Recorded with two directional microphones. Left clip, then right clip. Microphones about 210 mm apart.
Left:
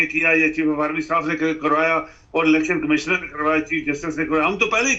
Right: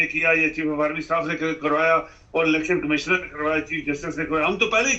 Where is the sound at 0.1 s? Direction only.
20° left (ahead or behind).